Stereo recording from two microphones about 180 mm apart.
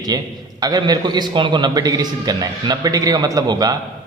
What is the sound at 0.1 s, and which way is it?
A man's voice, 20° right (ahead or behind).